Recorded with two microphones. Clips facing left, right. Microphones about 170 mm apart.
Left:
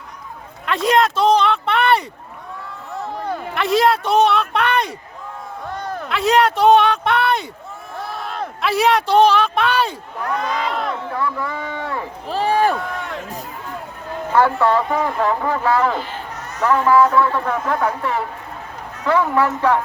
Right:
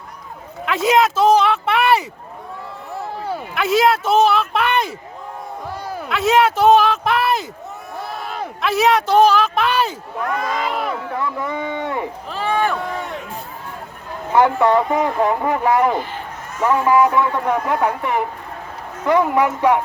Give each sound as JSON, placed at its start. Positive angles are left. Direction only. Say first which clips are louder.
{"t": 0.6, "sound": "speech", "louder": "right 1 dB", "side_deg": -5}
{"t": 3.2, "sound": "speech", "louder": "even", "side_deg": -5}
{"t": 7.9, "sound": "a sound", "louder": "left 1 dB", "side_deg": 0}
{"t": 10.7, "sound": "speech", "louder": "even", "side_deg": -5}
{"t": 11.1, "sound": "speech", "louder": "even", "side_deg": -20}
{"t": 12.3, "sound": "run", "louder": "left 4 dB", "side_deg": 35}
{"t": 14.3, "sound": "a man's voice", "louder": "right 2 dB", "side_deg": -20}